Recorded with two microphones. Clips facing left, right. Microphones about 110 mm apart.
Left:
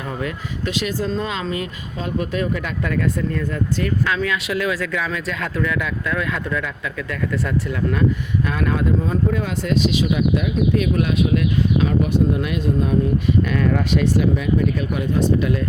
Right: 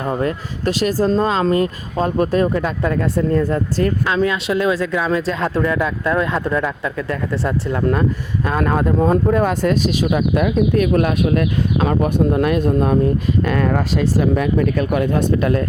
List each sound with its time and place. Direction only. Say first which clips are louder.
0.0 s speech: right 6 dB; 40° right (ahead or behind)
14.3 s speech: right 3 dB; 60° right (ahead or behind)